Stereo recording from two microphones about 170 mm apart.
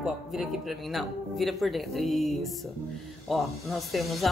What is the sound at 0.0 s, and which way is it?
Speech, centre (ahead or behind).